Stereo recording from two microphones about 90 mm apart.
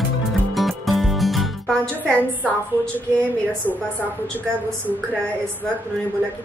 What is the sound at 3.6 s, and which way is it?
Speech, 25° left (ahead or behind).